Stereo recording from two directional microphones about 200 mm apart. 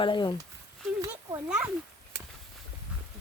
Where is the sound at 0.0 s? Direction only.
25° left (ahead or behind).